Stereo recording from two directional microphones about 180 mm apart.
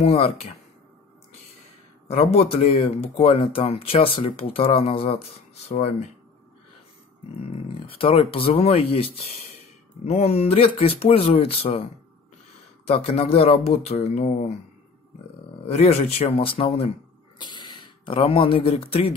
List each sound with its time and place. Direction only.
0.0 s speech: 35° left (ahead or behind)
2.0 s speech: 35° left (ahead or behind)
7.5 s speech: 30° left (ahead or behind)
12.8 s speech: 35° left (ahead or behind)
15.6 s speech: 35° left (ahead or behind)
17.4 s speech: 25° left (ahead or behind)